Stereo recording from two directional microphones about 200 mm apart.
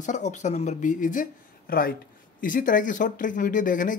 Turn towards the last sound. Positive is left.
turn(degrees=40)  # may be behind; listen again after turning